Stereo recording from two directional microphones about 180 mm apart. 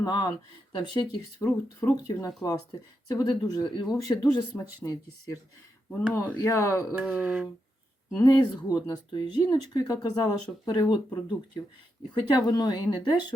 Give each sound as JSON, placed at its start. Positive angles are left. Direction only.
{"t": 0.0, "sound": "speech", "side_deg": 20}
{"t": 6.9, "sound": "mantra", "side_deg": -5}
{"t": 8.2, "sound": "speech", "side_deg": 20}